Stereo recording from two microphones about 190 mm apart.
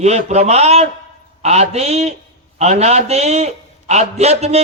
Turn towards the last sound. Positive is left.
turn(degrees=-35)  # may be behind; listen again after turning